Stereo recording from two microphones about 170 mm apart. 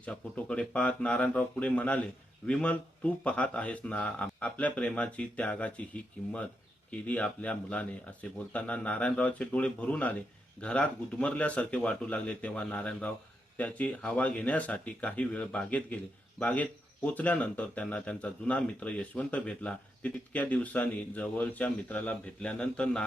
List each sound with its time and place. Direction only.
0.0 s speech: 5° left (ahead or behind)